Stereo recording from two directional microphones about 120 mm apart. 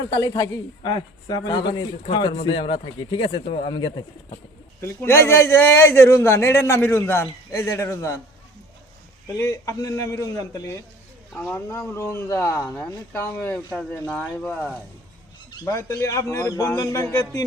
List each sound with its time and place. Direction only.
0.1 s a man's voice: 30° left (ahead or behind)
3.4 s speech: 65° left (ahead or behind)
3.7 s a man's voice: 40° left (ahead or behind)
4.8 s a man's voice: 20° left (ahead or behind)
9.4 s a man's voice: 25° left (ahead or behind)
11.3 s a man's voice: 15° left (ahead or behind)
12.6 s speech: 10° left (ahead or behind)
15.6 s a man's voice: 25° left (ahead or behind)